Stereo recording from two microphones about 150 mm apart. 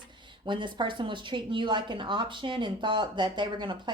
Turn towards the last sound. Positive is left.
turn(degrees=-30)  # may be behind; listen again after turning